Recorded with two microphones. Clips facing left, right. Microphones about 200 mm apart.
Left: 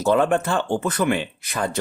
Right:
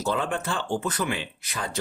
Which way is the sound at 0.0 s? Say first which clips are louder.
Left 9 dB; 55° left (ahead or behind).